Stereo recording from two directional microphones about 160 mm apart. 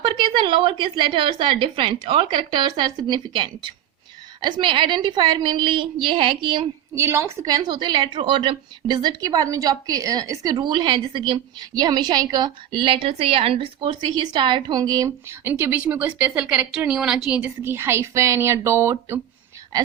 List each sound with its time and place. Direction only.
0.0 s a woman's voice: 30° right (ahead or behind)
6.9 s a woman's voice: 15° right (ahead or behind)